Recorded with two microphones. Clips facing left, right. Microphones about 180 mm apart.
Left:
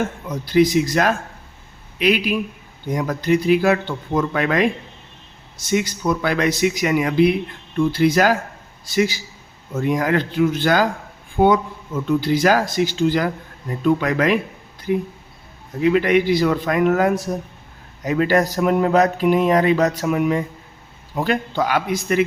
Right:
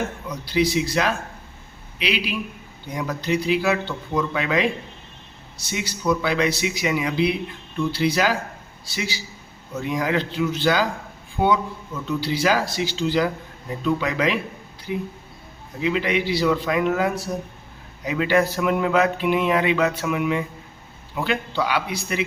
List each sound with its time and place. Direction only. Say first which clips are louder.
0.3 s a man's voice: left 7 dB; 50° left (ahead or behind)
15.8 s speech: left 6 dB; 50° left (ahead or behind)
18.0 s a sound: left 3 dB; 45° left (ahead or behind)
21.2 s speech: left 4 dB; 45° left (ahead or behind)